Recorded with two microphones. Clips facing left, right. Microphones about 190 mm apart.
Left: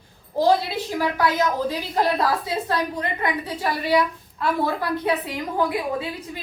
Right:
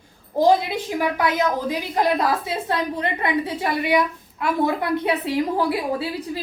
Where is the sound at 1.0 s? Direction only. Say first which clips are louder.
Even; 20° right (ahead or behind).